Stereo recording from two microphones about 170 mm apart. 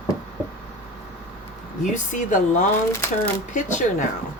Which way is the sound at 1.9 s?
45° left (ahead or behind).